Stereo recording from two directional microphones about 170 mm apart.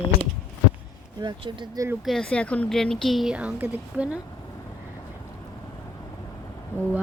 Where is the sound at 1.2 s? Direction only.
30° right (ahead or behind).